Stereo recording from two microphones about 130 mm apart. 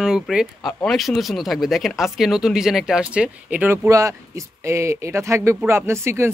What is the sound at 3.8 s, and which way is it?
Speech, 25° right (ahead or behind).